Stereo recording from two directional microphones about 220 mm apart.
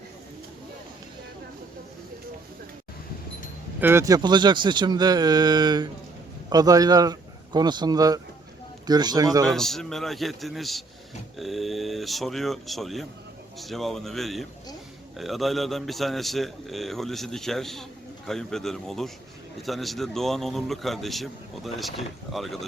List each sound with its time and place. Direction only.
3.8 s a man's voice: 10° right (ahead or behind)
9.5 s speech: centre (ahead or behind)